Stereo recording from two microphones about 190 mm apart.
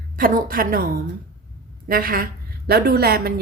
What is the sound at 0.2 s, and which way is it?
Speech, 45° right (ahead or behind).